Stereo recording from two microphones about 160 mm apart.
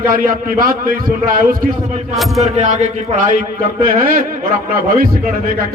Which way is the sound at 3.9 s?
60° right (ahead or behind).